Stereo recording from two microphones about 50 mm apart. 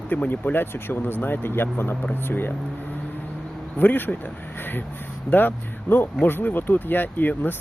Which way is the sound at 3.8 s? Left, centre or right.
Left.